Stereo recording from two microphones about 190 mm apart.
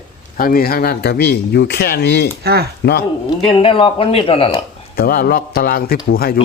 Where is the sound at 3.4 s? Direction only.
30° left (ahead or behind).